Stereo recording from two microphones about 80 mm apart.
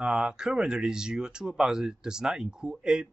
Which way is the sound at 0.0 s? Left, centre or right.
Centre.